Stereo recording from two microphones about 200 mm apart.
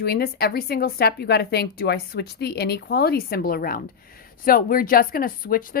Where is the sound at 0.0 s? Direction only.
50° left (ahead or behind).